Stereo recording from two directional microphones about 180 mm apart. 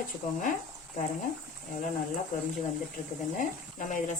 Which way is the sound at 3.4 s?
45° left (ahead or behind).